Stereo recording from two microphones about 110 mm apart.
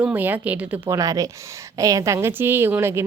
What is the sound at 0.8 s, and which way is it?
Speech, 30° right (ahead or behind).